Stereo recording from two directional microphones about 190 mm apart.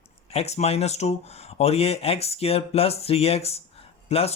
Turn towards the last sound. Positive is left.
turn(degrees=30)  # may be behind; listen again after turning